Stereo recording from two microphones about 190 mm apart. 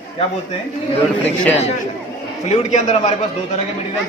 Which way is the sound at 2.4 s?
35° left (ahead or behind).